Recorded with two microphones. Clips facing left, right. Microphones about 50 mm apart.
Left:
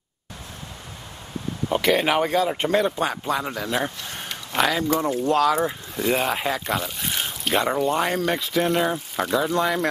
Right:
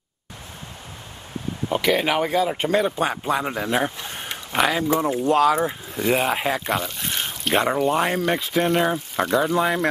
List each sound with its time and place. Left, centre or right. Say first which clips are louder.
1.7 s speech: even; centre